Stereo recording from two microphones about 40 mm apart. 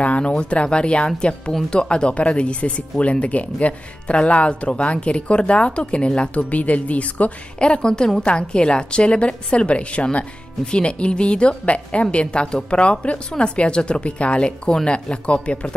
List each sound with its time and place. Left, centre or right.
0.0 s speech: left